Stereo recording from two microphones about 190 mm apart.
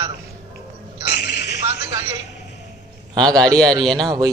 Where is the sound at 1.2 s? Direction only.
65° left (ahead or behind).